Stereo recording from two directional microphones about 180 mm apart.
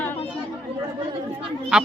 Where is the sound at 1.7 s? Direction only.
Centre (ahead or behind).